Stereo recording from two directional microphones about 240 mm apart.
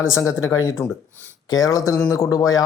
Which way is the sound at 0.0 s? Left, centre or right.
Centre.